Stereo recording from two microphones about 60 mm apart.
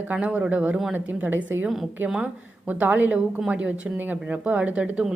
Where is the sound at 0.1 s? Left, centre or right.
Right.